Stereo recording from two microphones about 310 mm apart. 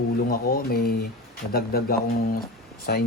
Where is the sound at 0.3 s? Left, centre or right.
Left.